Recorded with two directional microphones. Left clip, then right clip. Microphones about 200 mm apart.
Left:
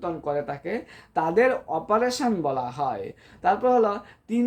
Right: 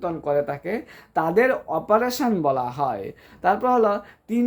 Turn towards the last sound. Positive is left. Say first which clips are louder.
# right 3 dB
turn(degrees=-30)  # may be behind; listen again after turning